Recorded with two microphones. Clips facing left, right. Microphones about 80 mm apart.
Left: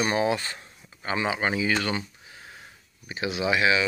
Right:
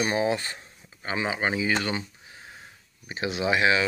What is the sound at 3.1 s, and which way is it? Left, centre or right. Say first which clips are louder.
Speech: even; right.